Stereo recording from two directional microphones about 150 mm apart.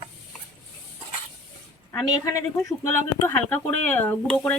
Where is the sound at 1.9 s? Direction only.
20° left (ahead or behind).